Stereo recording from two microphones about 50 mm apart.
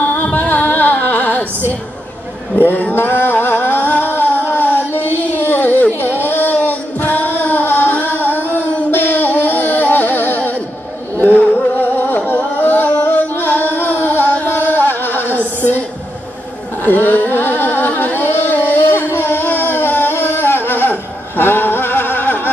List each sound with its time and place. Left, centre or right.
0.0 s music: left
2.6 s a sound: left
11.1 s music: left
12.3 s singing: left
16.8 s music: left